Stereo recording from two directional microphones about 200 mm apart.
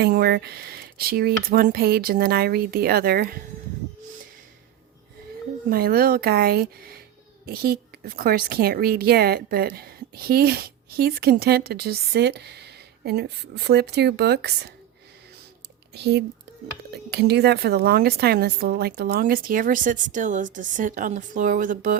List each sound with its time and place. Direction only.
0.0 s a woman's voice: 50° right (ahead or behind)
5.7 s a woman's voice: 50° right (ahead or behind)
16.0 s a woman's voice: 55° right (ahead or behind)